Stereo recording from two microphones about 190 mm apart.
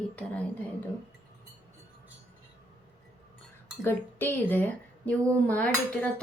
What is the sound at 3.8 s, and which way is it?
Dishes, 10° left (ahead or behind).